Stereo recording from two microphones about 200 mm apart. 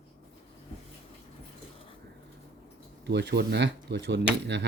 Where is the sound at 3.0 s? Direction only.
60° right (ahead or behind).